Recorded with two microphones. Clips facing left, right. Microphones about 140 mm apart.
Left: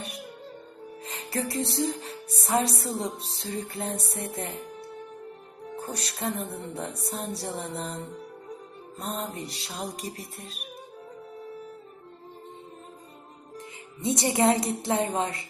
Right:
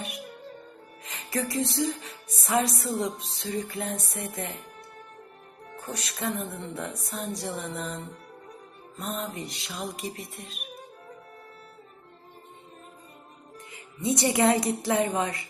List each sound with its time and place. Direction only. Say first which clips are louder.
1.0 s music: even; 30° left (ahead or behind)
6.0 s music: right 1 dB; 30° left (ahead or behind)
9.0 s music: even; 35° left (ahead or behind)
14.0 s a woman's voice: even; 25° left (ahead or behind)